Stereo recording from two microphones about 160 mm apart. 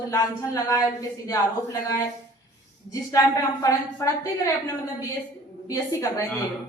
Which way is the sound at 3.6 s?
20° left (ahead or behind).